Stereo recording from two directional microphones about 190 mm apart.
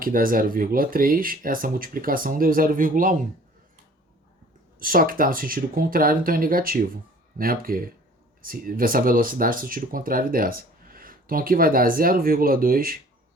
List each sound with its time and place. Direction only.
0.0 s speech: 50° right (ahead or behind)
4.8 s speech: 50° right (ahead or behind)